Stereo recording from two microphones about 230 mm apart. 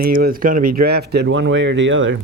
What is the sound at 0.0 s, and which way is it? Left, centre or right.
Speech, right.